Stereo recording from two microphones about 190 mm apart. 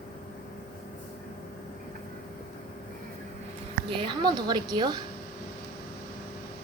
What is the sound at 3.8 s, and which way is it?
A woman's voice, 25° right (ahead or behind).